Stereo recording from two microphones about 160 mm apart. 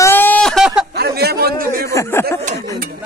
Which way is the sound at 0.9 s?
80° right.